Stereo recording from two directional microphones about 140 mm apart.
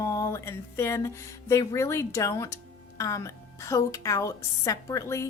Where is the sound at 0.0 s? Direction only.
20° left (ahead or behind).